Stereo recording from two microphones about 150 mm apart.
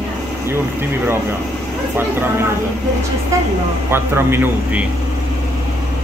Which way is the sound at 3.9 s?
15° right (ahead or behind).